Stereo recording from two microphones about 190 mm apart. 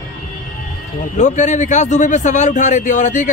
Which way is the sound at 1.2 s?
40° left (ahead or behind).